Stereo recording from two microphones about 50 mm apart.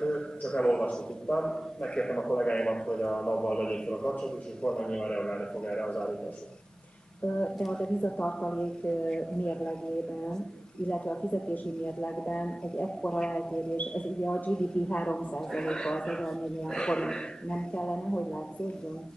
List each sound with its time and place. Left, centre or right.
0.0 s a man's voice: centre
7.5 s speech: centre
10.9 s a man's voice: left